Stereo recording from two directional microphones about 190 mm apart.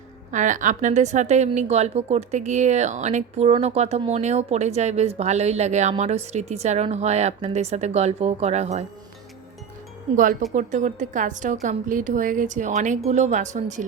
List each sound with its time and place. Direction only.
0.3 s a woman's voice: 40° right (ahead or behind)
10.5 s a woman's voice: 40° right (ahead or behind)